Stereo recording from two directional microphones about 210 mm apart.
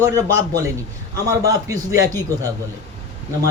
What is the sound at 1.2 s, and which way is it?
Speech, 15° right (ahead or behind).